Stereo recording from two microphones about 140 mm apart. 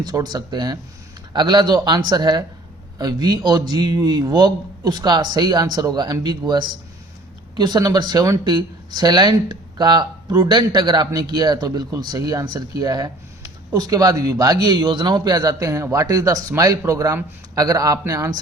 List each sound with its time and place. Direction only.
0.0 s speech: 30° right (ahead or behind)